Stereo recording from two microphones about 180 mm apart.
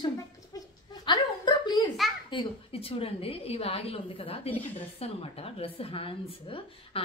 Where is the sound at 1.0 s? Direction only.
25° left (ahead or behind).